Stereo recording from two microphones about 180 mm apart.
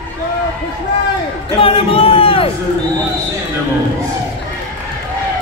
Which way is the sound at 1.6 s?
30° left (ahead or behind).